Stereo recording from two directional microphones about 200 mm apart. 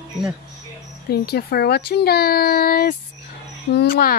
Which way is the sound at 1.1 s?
50° left (ahead or behind).